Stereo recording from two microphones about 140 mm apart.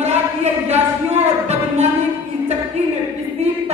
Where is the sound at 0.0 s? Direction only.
50° right (ahead or behind).